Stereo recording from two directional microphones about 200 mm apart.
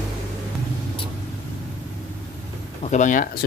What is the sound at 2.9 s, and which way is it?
Speech, 40° left (ahead or behind).